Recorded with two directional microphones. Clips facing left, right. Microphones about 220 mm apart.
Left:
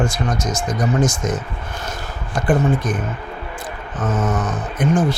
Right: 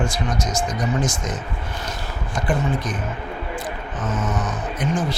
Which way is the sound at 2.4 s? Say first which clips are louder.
Left 5 dB; 50° left (ahead or behind).